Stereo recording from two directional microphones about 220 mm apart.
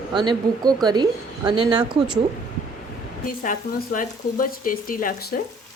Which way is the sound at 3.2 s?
40° left (ahead or behind).